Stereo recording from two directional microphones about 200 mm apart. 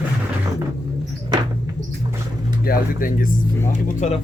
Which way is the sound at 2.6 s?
45° left (ahead or behind).